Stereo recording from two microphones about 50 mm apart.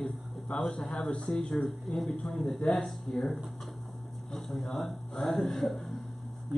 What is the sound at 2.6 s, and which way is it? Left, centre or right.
Speech, centre.